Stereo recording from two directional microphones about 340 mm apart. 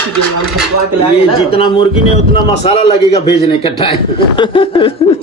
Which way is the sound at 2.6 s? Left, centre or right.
Centre.